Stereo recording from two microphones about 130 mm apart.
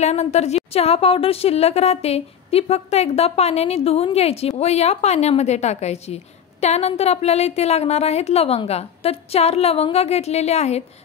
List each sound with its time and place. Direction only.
0.0 s a woman's voice: 60° left (ahead or behind)